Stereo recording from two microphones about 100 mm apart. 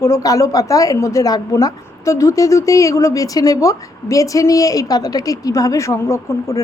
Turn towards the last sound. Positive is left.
turn(degrees=30)  # may be behind; listen again after turning